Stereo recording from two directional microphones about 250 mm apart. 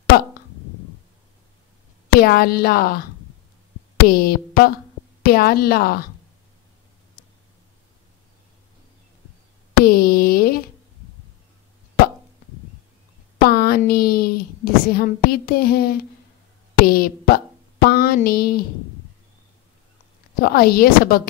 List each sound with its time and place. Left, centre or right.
0.1 s speech: left
2.1 s speech: left
4.1 s speech: left
9.8 s a sound: left
13.4 s a woman's voice: left
20.3 s speech: left